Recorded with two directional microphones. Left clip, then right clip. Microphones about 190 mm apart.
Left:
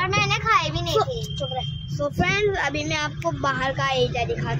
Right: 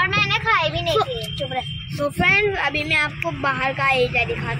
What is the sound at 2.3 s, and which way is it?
Speech, 15° left (ahead or behind).